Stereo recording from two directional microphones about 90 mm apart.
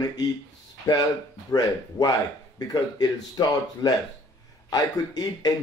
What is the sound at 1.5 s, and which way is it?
Speech, 45° left (ahead or behind).